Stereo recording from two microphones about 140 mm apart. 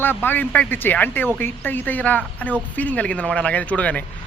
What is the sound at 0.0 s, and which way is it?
A man's voice, 15° left (ahead or behind).